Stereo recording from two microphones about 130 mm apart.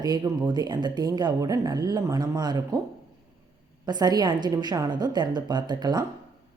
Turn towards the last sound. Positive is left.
turn(degrees=-35)  # may be behind; listen again after turning